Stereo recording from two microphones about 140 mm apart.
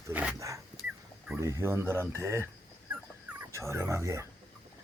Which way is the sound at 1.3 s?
20° right (ahead or behind).